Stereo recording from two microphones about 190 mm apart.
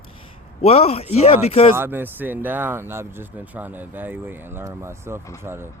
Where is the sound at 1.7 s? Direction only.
10° right (ahead or behind).